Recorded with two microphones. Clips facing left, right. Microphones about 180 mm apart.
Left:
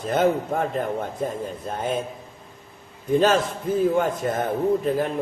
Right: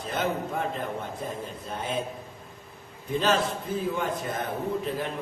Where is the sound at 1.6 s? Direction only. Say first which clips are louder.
Left 6 dB; 45° left (ahead or behind).